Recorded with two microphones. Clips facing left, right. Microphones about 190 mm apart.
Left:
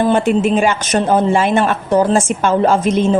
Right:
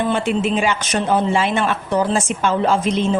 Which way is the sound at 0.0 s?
45° left (ahead or behind).